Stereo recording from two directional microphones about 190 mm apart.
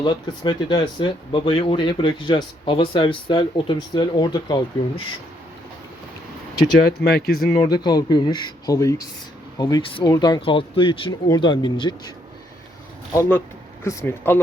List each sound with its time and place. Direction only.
0.0 s speech: 25° left (ahead or behind)
7.0 s speech: 55° left (ahead or behind)
7.6 s speech: 20° left (ahead or behind)
13.1 s speech: 10° left (ahead or behind)